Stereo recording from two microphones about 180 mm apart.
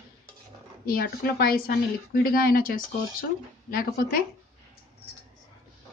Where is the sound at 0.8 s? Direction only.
55° left (ahead or behind).